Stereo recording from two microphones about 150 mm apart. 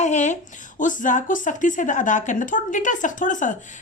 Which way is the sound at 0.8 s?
60° left (ahead or behind).